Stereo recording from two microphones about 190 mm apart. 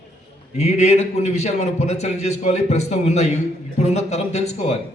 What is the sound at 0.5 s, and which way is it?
A man's voice, 35° left (ahead or behind).